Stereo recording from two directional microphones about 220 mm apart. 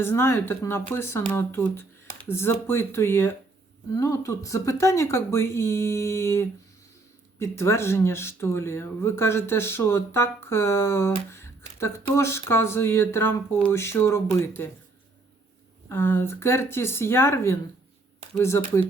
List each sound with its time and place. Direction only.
0.0 s speech: 10° left (ahead or behind)
15.9 s speech: 10° left (ahead or behind)